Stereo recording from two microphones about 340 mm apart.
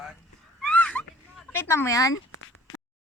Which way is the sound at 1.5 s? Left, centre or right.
Centre.